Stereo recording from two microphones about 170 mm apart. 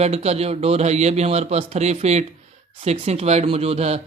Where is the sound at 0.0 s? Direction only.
40° right (ahead or behind).